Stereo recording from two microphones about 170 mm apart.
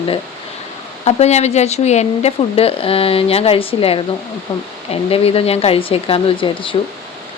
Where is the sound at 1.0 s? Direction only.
40° left (ahead or behind).